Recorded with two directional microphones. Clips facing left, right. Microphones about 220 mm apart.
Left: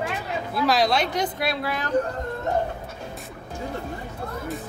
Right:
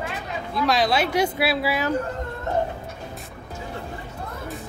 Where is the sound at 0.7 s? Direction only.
Centre (ahead or behind).